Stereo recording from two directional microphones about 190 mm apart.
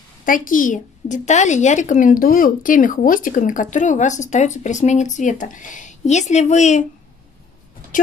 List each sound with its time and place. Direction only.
0.2 s a child's voice: 45° left (ahead or behind)
7.9 s speech: 45° left (ahead or behind)